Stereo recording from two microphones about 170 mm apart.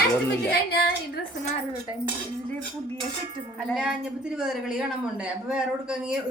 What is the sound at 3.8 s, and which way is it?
Speech, 5° right (ahead or behind).